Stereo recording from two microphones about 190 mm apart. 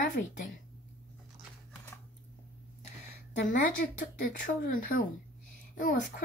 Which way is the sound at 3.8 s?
55° left (ahead or behind).